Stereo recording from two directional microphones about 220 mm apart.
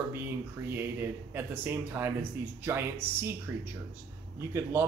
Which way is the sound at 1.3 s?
10° right (ahead or behind).